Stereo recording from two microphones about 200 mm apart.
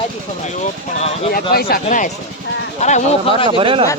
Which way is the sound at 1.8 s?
40° left (ahead or behind).